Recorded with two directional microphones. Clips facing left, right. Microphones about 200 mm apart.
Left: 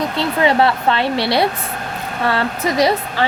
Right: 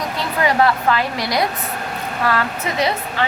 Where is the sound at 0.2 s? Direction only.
25° left (ahead or behind).